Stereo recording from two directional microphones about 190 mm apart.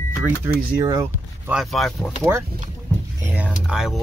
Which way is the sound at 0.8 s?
20° right (ahead or behind).